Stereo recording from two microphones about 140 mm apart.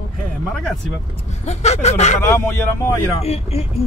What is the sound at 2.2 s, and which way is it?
Speech, 20° left (ahead or behind).